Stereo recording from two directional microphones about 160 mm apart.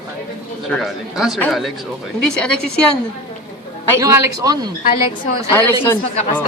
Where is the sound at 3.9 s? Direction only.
20° right (ahead or behind).